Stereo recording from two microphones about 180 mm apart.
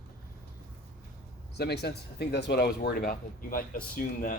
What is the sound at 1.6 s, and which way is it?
Speech, 65° left (ahead or behind).